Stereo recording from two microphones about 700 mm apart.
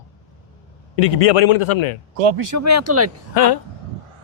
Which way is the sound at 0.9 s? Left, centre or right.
Left.